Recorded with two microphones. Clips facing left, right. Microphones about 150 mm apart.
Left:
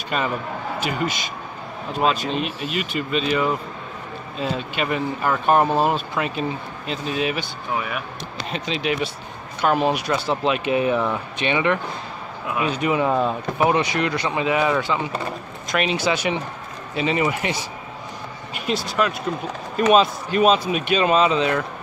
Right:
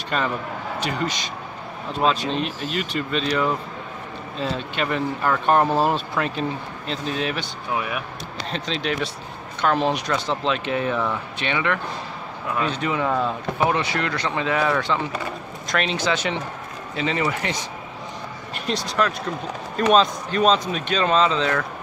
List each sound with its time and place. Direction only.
0.1 s speech: 5° left (ahead or behind)
8.5 s speech: 5° left (ahead or behind)